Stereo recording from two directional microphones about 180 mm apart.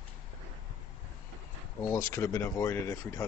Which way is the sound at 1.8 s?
15° left (ahead or behind).